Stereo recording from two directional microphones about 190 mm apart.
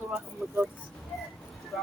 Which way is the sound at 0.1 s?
5° right (ahead or behind).